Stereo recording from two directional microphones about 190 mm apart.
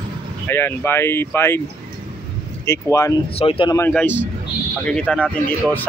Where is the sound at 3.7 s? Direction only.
10° left (ahead or behind).